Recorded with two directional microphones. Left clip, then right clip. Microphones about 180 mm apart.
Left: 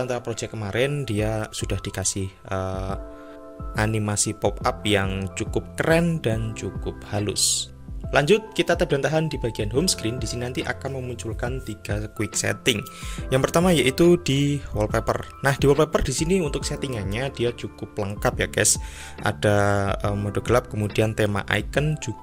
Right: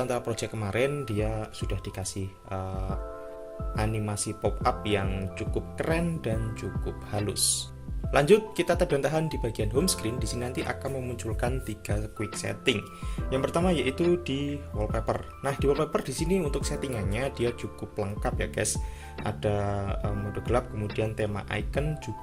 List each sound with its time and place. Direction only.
0.0 s speech: 20° left (ahead or behind)
0.9 s speech: 40° left (ahead or behind); by 11.9 s 20° left (ahead or behind)
12.4 s speech: 45° left (ahead or behind)